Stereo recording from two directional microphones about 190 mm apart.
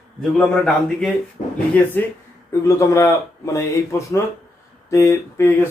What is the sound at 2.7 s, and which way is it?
Speech, 15° left (ahead or behind).